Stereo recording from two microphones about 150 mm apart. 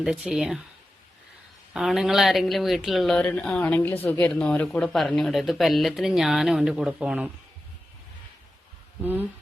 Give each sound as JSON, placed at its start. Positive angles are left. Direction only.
{"t": 0.0, "sound": "speech", "side_deg": -5}
{"t": 1.7, "sound": "speech", "side_deg": 0}
{"t": 9.0, "sound": "speech", "side_deg": -15}